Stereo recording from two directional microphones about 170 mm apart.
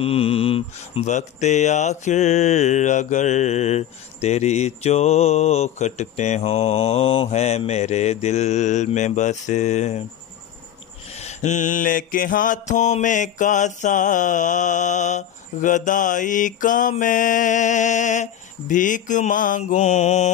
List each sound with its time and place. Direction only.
0.0 s speech: 35° left (ahead or behind)
11.1 s mantra: 40° left (ahead or behind)